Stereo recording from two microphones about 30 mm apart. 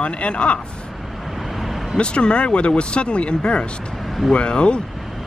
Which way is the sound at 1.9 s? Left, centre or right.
Left.